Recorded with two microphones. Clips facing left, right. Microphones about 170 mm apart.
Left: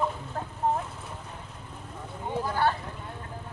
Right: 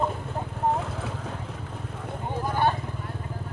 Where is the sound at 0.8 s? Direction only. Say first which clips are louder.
Right 7 dB; 90° right.